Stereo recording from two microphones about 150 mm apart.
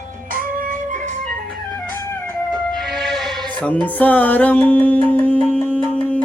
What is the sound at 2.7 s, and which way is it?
Music, centre (ahead or behind).